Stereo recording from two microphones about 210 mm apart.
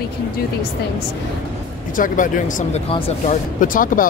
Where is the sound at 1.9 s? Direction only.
40° left (ahead or behind).